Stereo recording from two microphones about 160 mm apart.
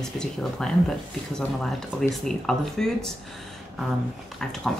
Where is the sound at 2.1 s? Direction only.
5° left (ahead or behind).